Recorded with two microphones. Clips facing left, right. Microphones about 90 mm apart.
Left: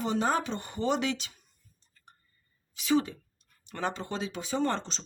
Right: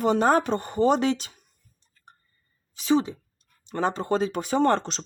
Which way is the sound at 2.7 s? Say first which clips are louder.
Right 4 dB; 35° right (ahead or behind).